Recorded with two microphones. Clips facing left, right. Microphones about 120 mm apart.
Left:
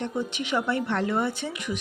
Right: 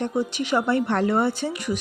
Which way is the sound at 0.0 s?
35° right (ahead or behind).